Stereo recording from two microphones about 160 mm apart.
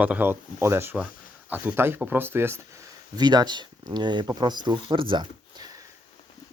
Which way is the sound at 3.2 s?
25° right (ahead or behind).